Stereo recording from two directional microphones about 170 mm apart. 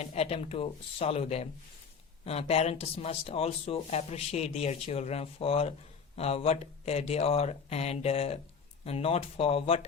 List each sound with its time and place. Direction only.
0.0 s speech: 35° left (ahead or behind)